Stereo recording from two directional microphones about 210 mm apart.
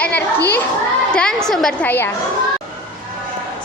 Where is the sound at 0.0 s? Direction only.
5° left (ahead or behind).